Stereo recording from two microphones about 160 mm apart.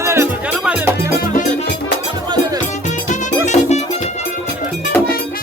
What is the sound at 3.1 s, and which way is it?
Music, 50° left (ahead or behind).